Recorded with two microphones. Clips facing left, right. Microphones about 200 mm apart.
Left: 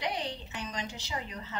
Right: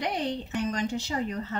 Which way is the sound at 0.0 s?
50° right (ahead or behind).